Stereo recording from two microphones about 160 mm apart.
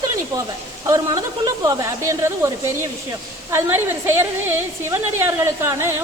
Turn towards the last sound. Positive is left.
turn(degrees=-15)  # may be behind; listen again after turning